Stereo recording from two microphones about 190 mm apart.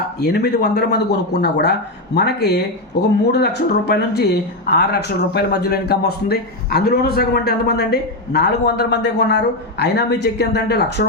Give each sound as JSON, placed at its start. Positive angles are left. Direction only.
{"t": 0.2, "sound": "a man's voice", "side_deg": 60}